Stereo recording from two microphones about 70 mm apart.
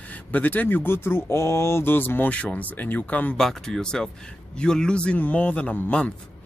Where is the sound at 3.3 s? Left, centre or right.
Centre.